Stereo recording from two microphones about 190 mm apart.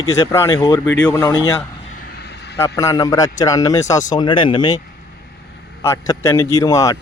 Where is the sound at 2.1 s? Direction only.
60° left (ahead or behind).